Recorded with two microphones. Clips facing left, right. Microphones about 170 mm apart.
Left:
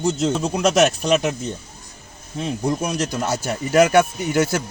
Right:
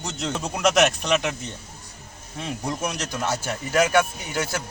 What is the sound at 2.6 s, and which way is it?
Speech, 35° left (ahead or behind).